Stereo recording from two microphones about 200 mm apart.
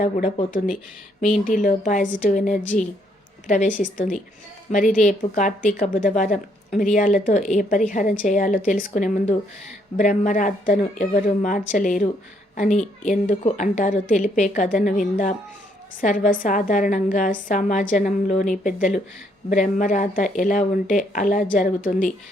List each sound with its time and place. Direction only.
0.0 s a woman's voice: 40° left (ahead or behind)